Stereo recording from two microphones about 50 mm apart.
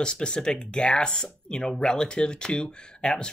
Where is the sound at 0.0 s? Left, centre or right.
Centre.